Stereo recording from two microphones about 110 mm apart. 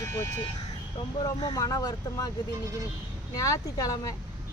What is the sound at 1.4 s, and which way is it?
Speech, 40° left (ahead or behind).